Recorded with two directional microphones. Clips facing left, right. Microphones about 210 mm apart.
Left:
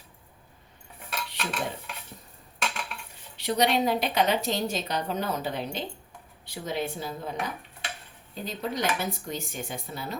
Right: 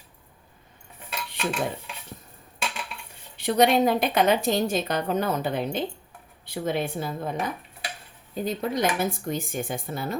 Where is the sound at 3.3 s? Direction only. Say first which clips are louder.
Right 5 dB; 50° right (ahead or behind).